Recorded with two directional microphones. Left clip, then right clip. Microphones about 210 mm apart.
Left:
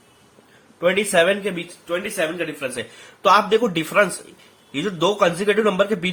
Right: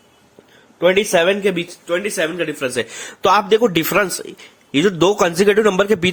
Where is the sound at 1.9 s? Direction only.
55° right (ahead or behind).